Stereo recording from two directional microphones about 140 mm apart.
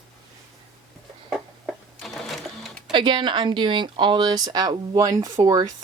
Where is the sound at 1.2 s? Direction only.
5° right (ahead or behind).